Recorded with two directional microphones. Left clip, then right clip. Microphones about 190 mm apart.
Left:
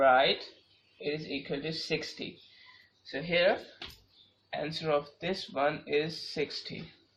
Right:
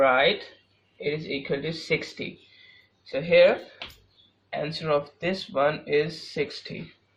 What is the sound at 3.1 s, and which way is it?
Speech, 40° right (ahead or behind).